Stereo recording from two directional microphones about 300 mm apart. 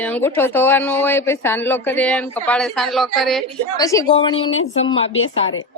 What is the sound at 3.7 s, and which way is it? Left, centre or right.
Speech, centre.